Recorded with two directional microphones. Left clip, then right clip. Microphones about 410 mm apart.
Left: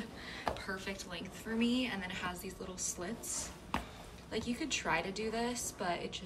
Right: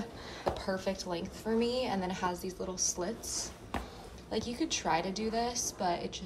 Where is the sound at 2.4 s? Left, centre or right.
Right.